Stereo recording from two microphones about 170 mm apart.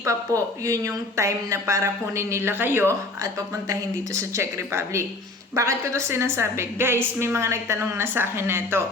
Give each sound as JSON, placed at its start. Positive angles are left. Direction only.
{"t": 0.0, "sound": "a woman's voice", "side_deg": -20}